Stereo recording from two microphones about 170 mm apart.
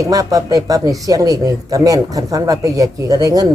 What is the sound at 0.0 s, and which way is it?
Speech, 20° right (ahead or behind).